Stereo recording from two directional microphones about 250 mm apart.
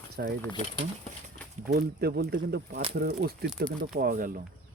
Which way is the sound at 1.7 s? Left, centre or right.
Right.